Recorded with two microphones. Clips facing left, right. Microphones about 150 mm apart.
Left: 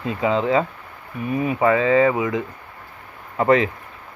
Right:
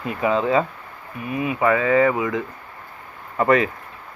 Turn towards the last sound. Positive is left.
turn(degrees=25)  # may be behind; listen again after turning